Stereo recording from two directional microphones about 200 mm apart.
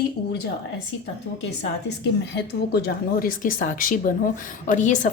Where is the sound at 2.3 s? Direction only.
55° left (ahead or behind).